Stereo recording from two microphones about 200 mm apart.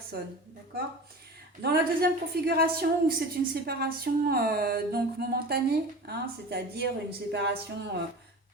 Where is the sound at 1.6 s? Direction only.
50° right (ahead or behind).